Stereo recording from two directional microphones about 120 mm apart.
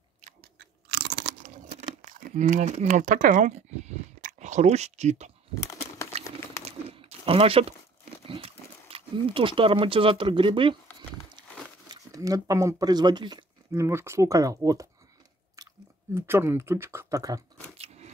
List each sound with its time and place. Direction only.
1.4 s a sound: 90° right; by 5.3 s 70° right (ahead or behind)
5.5 s crumpling: 25° left (ahead or behind)
6.6 s a sound: 55° right (ahead or behind)
8.3 s speech: 55° right (ahead or behind)
11.9 s speech: 30° right (ahead or behind)
13.7 s speech: 25° right (ahead or behind)
16.2 s speech: 20° right (ahead or behind)
17.7 s biting: 65° right (ahead or behind)